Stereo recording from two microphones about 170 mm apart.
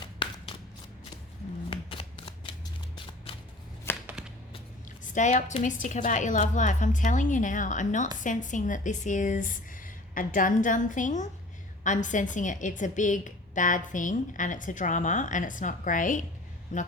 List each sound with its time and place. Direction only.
0.2 s a sound: 30° left (ahead or behind)
1.7 s shuffling cards: 30° left (ahead or behind)
3.9 s chopping: 15° left (ahead or behind)
5.1 s a woman's voice: 45° left (ahead or behind)